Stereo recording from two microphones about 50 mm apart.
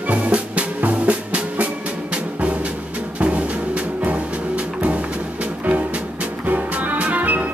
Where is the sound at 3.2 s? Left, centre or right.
Right.